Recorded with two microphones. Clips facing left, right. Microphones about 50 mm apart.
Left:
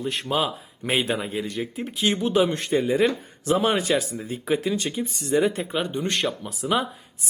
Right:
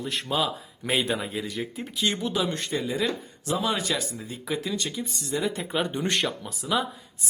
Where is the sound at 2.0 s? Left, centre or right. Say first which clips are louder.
Left 6 dB; centre.